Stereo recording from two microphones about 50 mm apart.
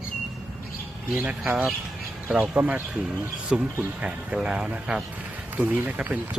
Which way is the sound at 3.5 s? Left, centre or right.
Centre.